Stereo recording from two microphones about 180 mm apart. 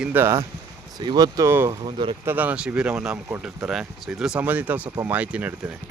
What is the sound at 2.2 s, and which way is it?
Speech, 10° right (ahead or behind).